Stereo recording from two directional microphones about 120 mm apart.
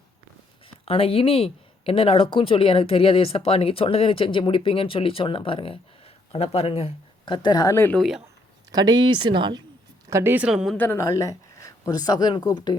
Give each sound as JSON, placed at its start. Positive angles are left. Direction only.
{"t": 0.9, "sound": "speech", "side_deg": 50}
{"t": 6.3, "sound": "speech", "side_deg": 55}
{"t": 7.3, "sound": "speech", "side_deg": 35}
{"t": 7.9, "sound": "a woman's voice", "side_deg": 0}
{"t": 8.7, "sound": "speech", "side_deg": -35}
{"t": 10.1, "sound": "a woman's voice", "side_deg": -25}
{"t": 10.3, "sound": "a woman's voice", "side_deg": -5}
{"t": 10.8, "sound": "a woman's voice", "side_deg": 20}
{"t": 11.0, "sound": "speech", "side_deg": 30}